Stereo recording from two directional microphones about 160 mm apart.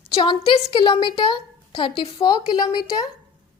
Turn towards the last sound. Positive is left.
turn(degrees=25)  # may be behind; listen again after turning